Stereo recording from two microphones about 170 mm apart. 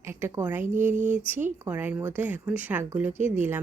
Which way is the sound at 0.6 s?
50° right (ahead or behind).